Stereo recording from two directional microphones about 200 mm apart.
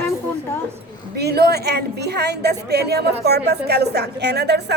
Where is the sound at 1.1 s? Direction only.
55° right (ahead or behind).